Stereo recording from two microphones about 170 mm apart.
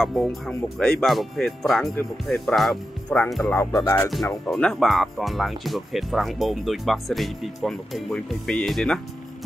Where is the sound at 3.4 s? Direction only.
15° left (ahead or behind).